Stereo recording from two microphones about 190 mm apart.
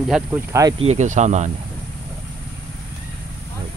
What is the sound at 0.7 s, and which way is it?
Speech, 35° right (ahead or behind).